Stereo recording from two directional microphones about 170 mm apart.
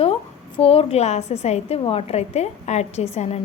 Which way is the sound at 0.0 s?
35° left (ahead or behind).